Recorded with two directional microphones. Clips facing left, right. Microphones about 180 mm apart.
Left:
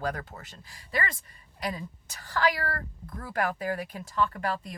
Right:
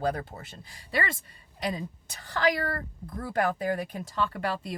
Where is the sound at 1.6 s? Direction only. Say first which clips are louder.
Right 2 dB; 25° right (ahead or behind).